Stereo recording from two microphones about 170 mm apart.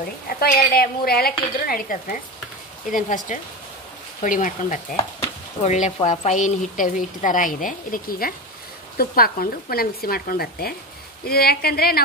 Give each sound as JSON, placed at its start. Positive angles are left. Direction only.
{"t": 0.3, "sound": "a woman's voice", "side_deg": 60}